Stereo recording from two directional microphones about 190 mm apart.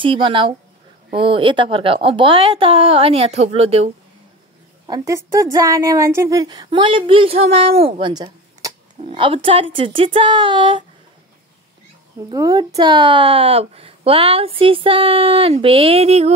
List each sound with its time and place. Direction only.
0.0 s a woman's voice: 25° right (ahead or behind)
4.8 s a woman's voice: 20° right (ahead or behind)
12.3 s a woman's voice: 20° right (ahead or behind)